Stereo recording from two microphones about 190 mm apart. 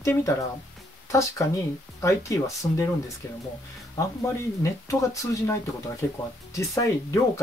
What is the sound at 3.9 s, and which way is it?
Speech, 15° left (ahead or behind).